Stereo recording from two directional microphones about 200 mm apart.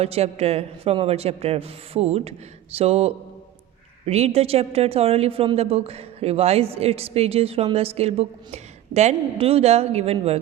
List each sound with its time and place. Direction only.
0.0 s a woman's voice: 30° right (ahead or behind)